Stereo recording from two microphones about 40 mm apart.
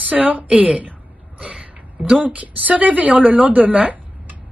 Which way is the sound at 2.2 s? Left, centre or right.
Right.